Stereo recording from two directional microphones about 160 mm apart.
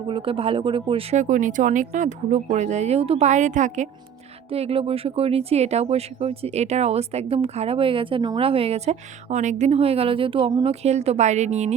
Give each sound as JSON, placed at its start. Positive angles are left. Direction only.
{"t": 0.1, "sound": "speech", "side_deg": -35}
{"t": 1.1, "sound": "speech", "side_deg": -50}
{"t": 4.5, "sound": "speech", "side_deg": -40}